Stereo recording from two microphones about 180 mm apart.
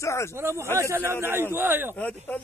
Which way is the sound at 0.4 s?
15° right (ahead or behind).